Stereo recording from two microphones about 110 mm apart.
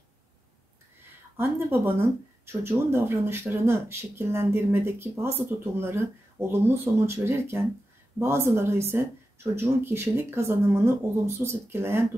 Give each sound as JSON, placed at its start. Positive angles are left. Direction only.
{"t": 1.3, "sound": "speech", "side_deg": -25}